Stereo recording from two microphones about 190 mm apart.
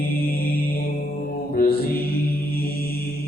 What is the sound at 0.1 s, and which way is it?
Mantra, 50° left (ahead or behind).